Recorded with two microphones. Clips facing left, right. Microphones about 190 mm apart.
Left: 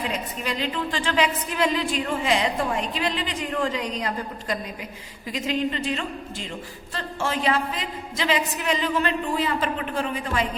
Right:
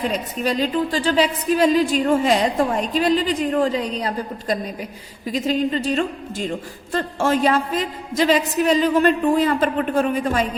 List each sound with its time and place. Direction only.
0.4 s a woman's voice: 40° right (ahead or behind)